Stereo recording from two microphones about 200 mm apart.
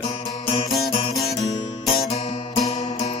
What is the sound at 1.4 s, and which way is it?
Guitar, 30° left (ahead or behind).